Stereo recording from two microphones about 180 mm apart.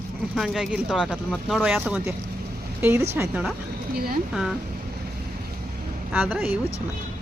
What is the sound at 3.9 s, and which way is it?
Speech, 60° right (ahead or behind).